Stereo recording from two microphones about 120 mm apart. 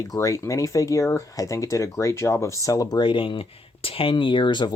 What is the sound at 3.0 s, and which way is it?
Speech, 45° left (ahead or behind).